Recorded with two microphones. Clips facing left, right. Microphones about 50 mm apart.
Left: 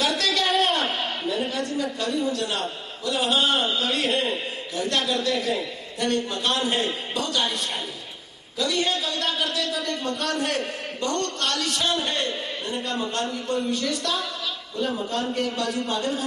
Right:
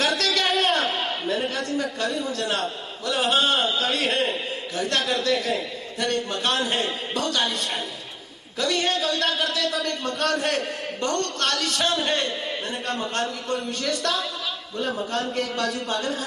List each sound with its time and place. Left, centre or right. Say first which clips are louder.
0.0 s a sound: right 1 dB; right
2.0 s a man's voice: left 1 dB; right
8.5 s a man's voice: right 1 dB; right
15.1 s a man's voice: even; right